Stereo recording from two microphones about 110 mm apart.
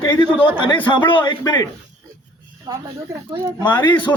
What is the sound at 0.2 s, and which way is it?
A man's voice, 50° left (ahead or behind).